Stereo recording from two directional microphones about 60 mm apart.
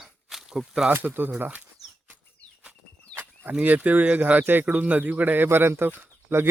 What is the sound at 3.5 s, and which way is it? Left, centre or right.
Speech, right.